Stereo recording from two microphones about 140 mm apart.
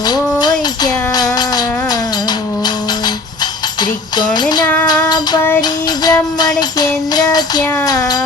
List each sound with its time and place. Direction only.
0.0 s music: 30° left (ahead or behind)
3.8 s music: 30° left (ahead or behind)
4.9 s child singing: 30° left (ahead or behind)
6.6 s music: 30° left (ahead or behind)
7.9 s child singing: 25° left (ahead or behind)